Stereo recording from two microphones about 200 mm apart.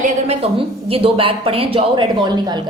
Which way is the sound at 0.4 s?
30° right (ahead or behind).